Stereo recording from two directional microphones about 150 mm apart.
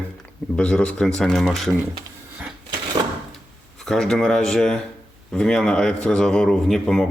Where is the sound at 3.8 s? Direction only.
5° left (ahead or behind).